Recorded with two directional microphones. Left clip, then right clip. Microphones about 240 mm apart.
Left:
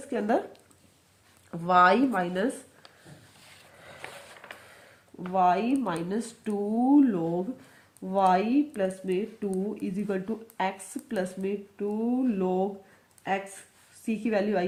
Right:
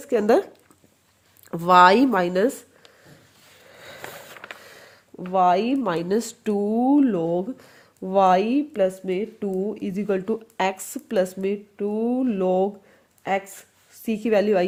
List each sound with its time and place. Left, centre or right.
0.1 s a woman's voice: right
1.5 s a woman's voice: right
4.0 s a sound: right
5.3 s a woman's voice: right